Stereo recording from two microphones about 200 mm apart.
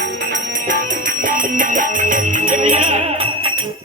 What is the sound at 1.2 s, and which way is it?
Music, 40° right (ahead or behind).